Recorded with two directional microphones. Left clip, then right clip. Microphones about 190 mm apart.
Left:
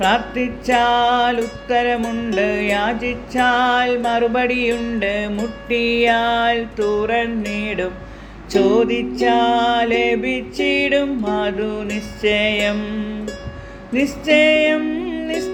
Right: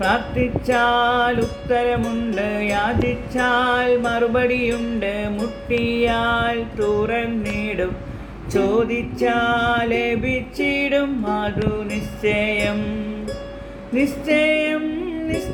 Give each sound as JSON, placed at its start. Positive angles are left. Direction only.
{"t": 0.0, "sound": "music", "side_deg": 35}
{"t": 13.9, "sound": "music", "side_deg": 35}